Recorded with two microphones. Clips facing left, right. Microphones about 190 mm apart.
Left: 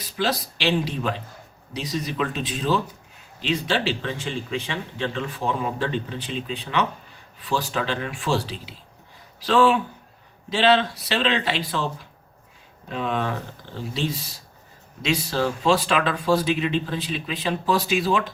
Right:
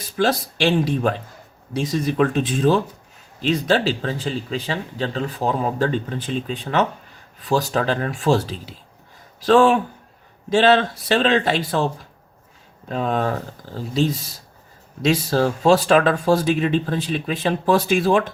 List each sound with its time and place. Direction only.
0.0 s speech: 50° right (ahead or behind)
12.9 s speech: 40° right (ahead or behind)